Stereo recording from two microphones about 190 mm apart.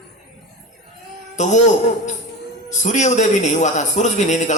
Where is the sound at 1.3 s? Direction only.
40° left (ahead or behind).